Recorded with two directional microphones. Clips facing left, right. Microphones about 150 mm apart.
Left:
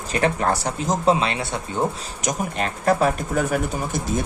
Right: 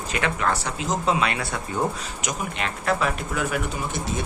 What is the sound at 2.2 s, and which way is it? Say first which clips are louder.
Speech: left 5 dB; 40° left (ahead or behind).